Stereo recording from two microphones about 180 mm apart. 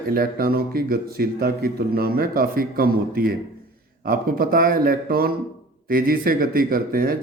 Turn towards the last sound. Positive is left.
turn(degrees=-55)  # may be behind; listen again after turning